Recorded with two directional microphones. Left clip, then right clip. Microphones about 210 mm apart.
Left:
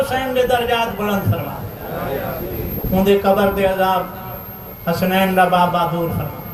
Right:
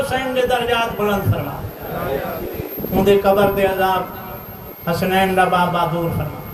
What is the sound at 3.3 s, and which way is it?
A man's voice, 45° left (ahead or behind).